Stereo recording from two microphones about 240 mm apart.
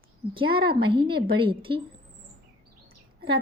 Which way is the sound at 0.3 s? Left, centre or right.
Right.